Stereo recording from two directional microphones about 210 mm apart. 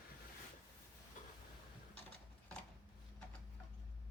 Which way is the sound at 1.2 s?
40° left (ahead or behind).